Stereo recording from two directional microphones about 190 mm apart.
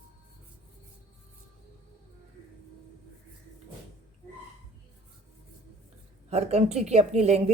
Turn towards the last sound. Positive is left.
turn(degrees=-35)  # may be behind; listen again after turning